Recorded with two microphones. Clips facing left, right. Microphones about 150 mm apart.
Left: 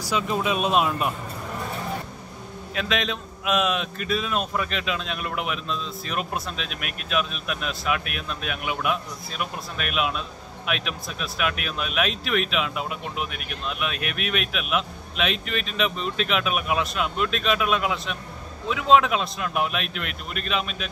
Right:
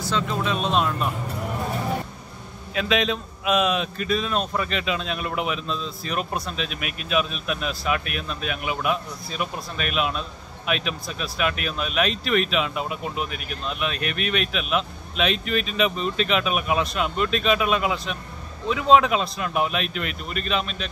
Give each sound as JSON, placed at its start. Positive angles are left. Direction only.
{"t": 0.1, "sound": "speech", "side_deg": 10}
{"t": 2.7, "sound": "a man's voice", "side_deg": 0}